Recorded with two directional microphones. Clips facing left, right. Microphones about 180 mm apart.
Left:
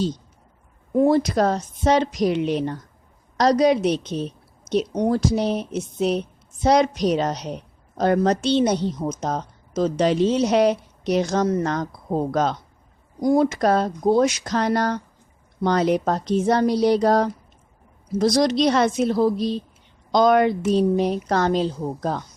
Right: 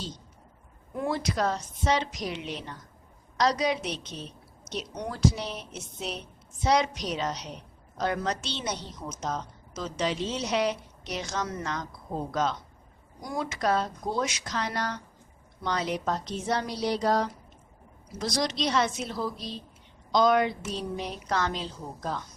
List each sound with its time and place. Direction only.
0.9 s a woman's voice: 35° left (ahead or behind)
9.2 s a woman's voice: 50° left (ahead or behind)
13.2 s a woman's voice: 35° left (ahead or behind)